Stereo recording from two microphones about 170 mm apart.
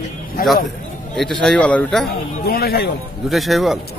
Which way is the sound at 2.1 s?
65° left (ahead or behind).